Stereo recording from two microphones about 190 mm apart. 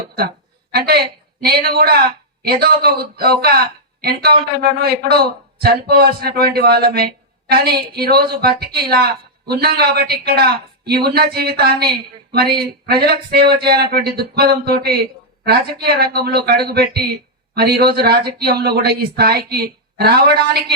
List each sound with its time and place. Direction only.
0.2 s a woman's voice: 55° right (ahead or behind)